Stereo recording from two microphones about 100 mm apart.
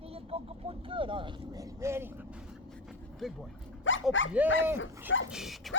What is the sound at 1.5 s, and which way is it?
Speech, 30° right (ahead or behind).